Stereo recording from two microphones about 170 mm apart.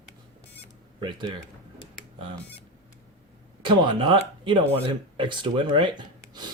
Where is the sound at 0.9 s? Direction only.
30° right (ahead or behind).